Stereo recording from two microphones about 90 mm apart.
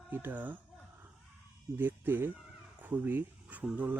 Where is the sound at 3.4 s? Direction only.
15° right (ahead or behind).